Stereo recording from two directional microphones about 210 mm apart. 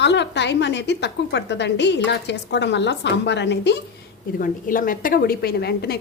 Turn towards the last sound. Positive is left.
turn(degrees=50)  # may be behind; listen again after turning